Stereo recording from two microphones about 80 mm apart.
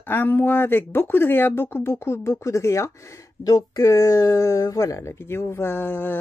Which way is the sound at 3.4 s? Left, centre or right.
Left.